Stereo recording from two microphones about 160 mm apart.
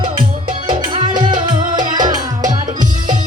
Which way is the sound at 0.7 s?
35° right (ahead or behind).